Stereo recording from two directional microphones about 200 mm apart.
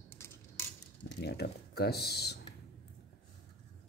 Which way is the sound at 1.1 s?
55° left (ahead or behind).